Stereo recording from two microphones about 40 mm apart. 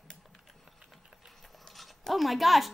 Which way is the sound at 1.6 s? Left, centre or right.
Centre.